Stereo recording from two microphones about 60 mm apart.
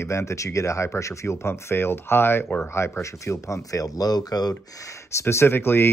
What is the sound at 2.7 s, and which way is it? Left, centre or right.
Speech, left.